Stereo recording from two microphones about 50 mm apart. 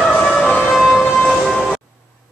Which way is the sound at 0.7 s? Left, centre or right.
Centre.